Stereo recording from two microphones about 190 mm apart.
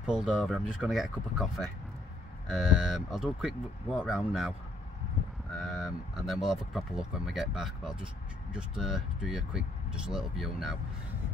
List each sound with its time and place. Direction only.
0.0 s speech: 5° right (ahead or behind)
5.6 s speech: centre (ahead or behind)